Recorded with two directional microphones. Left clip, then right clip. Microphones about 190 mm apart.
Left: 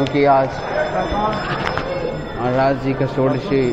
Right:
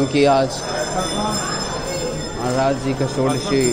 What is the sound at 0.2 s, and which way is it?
Speech, 30° right (ahead or behind).